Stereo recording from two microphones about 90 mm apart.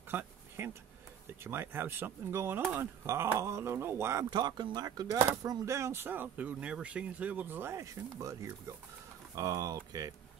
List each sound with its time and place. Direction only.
0.1 s a sound: 25° right (ahead or behind)
1.4 s speech: 25° right (ahead or behind)
4.3 s speech: 55° right (ahead or behind)